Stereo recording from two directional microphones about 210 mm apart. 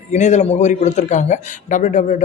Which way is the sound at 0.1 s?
35° left (ahead or behind).